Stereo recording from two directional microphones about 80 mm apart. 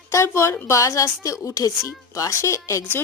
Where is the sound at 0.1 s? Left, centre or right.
Left.